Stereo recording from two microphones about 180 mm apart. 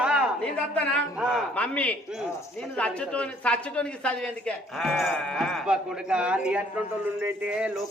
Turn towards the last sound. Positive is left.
turn(degrees=-5)  # may be behind; listen again after turning